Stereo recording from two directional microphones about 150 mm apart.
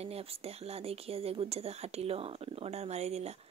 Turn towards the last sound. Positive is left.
turn(degrees=-45)  # may be behind; listen again after turning